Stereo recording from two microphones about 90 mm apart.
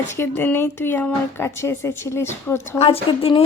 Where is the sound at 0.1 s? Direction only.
25° left (ahead or behind).